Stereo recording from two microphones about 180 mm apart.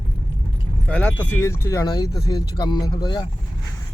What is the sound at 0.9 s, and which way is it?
Speech, 10° left (ahead or behind).